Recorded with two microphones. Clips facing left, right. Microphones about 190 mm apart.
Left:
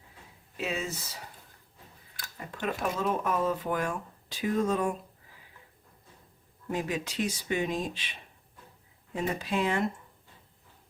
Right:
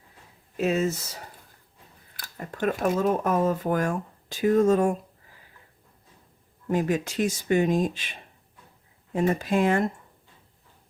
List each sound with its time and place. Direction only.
0.5 s speech: 45° right (ahead or behind)
2.2 s speech: 50° right (ahead or behind)
6.7 s speech: 50° right (ahead or behind)
9.1 s speech: 50° right (ahead or behind)